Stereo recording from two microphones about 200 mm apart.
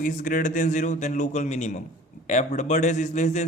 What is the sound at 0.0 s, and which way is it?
A man's voice, 45° left (ahead or behind).